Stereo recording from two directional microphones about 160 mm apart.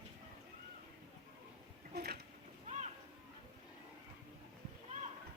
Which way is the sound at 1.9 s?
75° right (ahead or behind).